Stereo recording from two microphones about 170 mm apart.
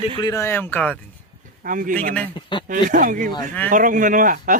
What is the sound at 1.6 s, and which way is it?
Speech, 50° right (ahead or behind).